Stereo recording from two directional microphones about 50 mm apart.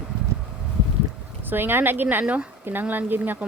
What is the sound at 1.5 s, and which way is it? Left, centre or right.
Speech, right.